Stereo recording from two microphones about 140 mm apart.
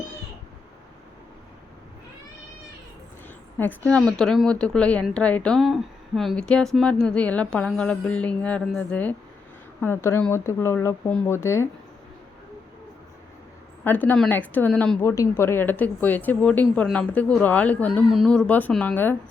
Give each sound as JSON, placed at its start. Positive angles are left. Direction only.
{"t": 3.6, "sound": "speech", "side_deg": 10}
{"t": 13.8, "sound": "speech", "side_deg": 10}